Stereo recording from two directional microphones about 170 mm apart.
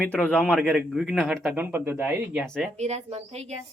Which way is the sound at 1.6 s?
10° right (ahead or behind).